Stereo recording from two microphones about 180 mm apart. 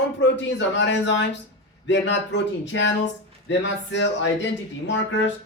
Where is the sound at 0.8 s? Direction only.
85° left.